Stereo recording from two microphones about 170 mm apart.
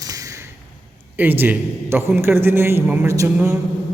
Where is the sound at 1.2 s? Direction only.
10° right (ahead or behind).